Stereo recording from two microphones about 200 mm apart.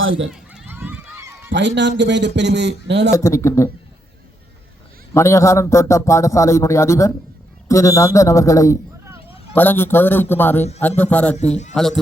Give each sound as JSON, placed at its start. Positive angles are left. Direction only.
{"t": 0.3, "sound": "run", "side_deg": -5}
{"t": 1.5, "sound": "speech", "side_deg": -65}
{"t": 3.2, "sound": "a man's voice", "side_deg": 15}
{"t": 5.1, "sound": "a man's voice", "side_deg": 15}